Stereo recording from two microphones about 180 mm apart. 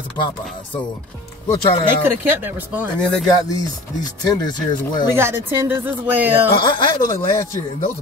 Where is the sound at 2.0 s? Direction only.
10° right (ahead or behind).